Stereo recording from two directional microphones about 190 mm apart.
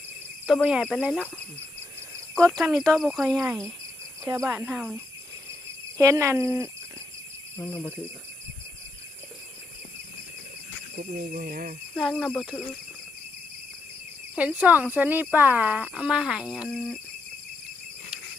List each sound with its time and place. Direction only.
0.4 s speech: 5° right (ahead or behind)
2.4 s speech: centre (ahead or behind)
4.2 s speech: 15° right (ahead or behind)
6.0 s speech: 15° right (ahead or behind)
7.5 s speech: 10° left (ahead or behind)
10.9 s speech: 50° right (ahead or behind)
11.9 s speech: centre (ahead or behind)
14.3 s speech: 10° right (ahead or behind)